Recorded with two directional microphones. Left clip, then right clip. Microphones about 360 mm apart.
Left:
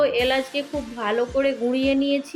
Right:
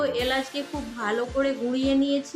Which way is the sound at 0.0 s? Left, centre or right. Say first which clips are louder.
Left 5 dB; centre.